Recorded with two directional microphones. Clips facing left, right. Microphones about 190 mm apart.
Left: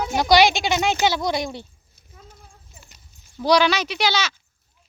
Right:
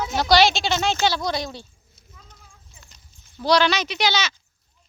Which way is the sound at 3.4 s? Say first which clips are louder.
Left 1 dB; 10° left (ahead or behind).